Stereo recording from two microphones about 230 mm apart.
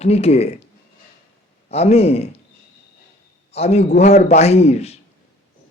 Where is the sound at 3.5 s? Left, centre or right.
Left.